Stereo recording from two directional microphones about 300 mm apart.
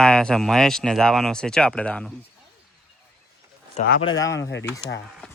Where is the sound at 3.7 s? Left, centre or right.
Left.